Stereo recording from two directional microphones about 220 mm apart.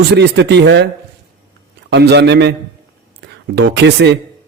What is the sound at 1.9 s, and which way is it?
A man's voice, 50° right (ahead or behind).